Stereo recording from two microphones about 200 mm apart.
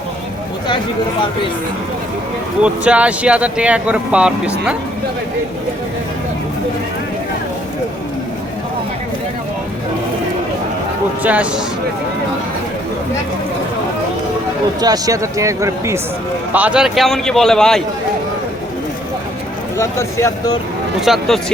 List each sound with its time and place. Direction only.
2.6 s speech: 5° right (ahead or behind)
11.2 s speech: 5° right (ahead or behind)
14.8 s a man's voice: 20° right (ahead or behind); by 17.8 s centre (ahead or behind)
19.7 s speech: 15° left (ahead or behind)
21.0 s a man's voice: centre (ahead or behind)